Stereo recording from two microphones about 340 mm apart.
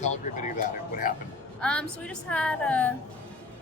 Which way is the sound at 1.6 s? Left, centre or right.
Centre.